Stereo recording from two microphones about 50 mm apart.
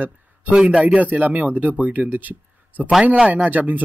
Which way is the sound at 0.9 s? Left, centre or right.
Right.